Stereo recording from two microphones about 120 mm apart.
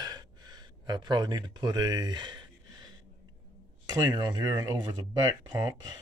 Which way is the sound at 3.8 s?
35° right (ahead or behind).